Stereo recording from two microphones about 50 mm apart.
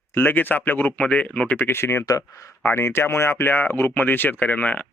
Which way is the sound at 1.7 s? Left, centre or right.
Left.